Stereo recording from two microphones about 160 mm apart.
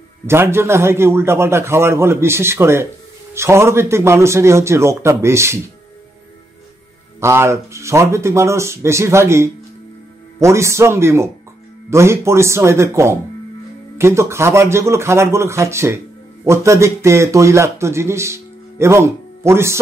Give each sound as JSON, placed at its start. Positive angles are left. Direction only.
{"t": 0.3, "sound": "a man's voice", "side_deg": -15}
{"t": 7.2, "sound": "a man's voice", "side_deg": -15}